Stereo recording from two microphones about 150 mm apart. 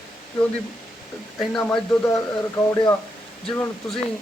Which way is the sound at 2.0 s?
20° left (ahead or behind).